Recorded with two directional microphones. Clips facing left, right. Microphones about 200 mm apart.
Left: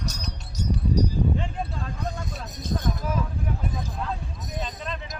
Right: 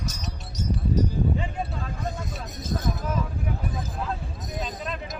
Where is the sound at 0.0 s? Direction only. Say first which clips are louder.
Even; centre (ahead or behind).